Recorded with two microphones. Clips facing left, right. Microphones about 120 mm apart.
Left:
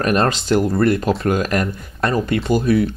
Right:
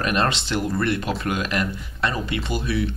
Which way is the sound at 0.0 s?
40° left (ahead or behind).